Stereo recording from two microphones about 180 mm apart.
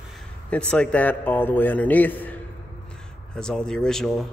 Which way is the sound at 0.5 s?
5° left (ahead or behind).